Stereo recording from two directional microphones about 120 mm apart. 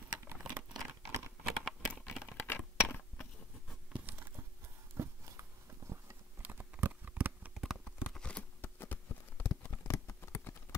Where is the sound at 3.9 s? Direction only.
15° right (ahead or behind).